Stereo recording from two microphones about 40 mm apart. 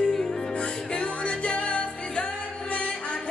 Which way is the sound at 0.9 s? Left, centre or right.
Left.